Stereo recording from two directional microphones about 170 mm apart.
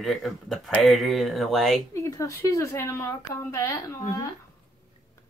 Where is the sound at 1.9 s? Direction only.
20° left (ahead or behind).